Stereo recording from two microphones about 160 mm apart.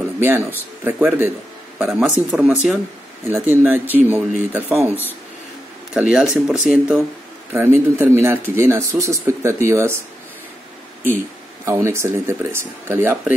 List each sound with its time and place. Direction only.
0.2 s speech: 15° right (ahead or behind)
7.5 s speech: 15° right (ahead or behind)
11.6 s speech: 15° right (ahead or behind)